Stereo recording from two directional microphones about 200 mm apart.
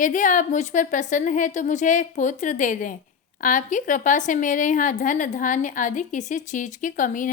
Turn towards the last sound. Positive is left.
turn(degrees=40)  # may be behind; listen again after turning